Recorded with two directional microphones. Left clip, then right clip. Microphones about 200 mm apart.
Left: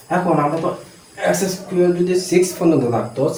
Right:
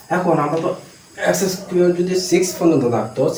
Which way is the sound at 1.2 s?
15° left (ahead or behind).